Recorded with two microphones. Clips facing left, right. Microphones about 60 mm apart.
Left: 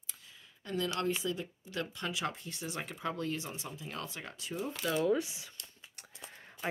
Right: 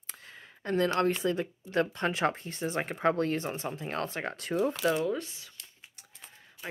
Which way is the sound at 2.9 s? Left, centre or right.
Right.